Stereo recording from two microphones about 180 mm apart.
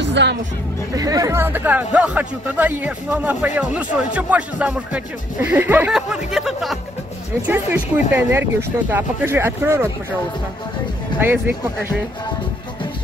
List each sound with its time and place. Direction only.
0.0 s music: 80° right
0.9 s speech: 20° right (ahead or behind)
11.1 s speech: 10° right (ahead or behind)